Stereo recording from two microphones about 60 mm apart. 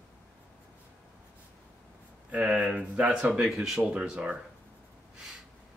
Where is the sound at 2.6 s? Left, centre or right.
Centre.